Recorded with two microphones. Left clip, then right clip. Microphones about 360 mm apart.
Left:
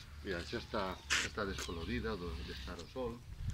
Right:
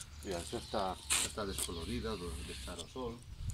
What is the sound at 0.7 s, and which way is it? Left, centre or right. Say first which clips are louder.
Speech: even; centre.